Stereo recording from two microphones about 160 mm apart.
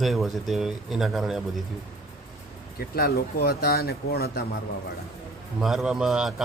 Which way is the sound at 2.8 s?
75° left (ahead or behind).